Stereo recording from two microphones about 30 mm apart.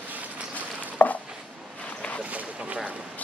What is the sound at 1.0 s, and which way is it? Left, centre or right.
Chopping, left.